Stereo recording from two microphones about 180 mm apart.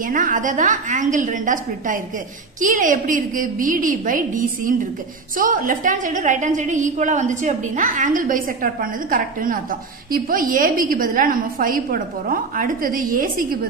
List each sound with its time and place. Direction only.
0.0 s a woman's voice: 50° right (ahead or behind)